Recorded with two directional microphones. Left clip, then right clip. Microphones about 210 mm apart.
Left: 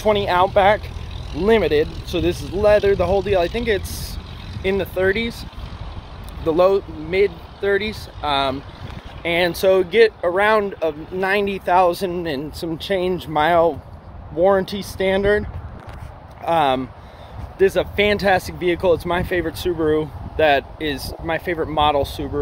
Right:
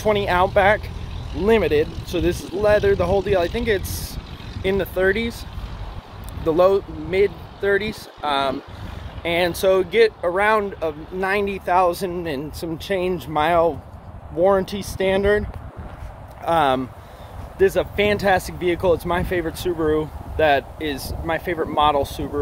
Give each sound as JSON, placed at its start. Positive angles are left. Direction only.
{"t": 0.0, "sound": "speech", "side_deg": 5}
{"t": 6.4, "sound": "speech", "side_deg": 0}
{"t": 16.4, "sound": "speech", "side_deg": 0}